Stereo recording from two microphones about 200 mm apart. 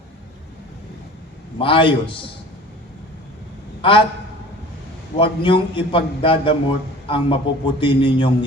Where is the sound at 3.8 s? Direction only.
25° left (ahead or behind).